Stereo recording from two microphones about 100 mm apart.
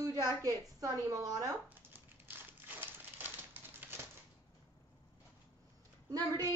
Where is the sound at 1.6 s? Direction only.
20° right (ahead or behind).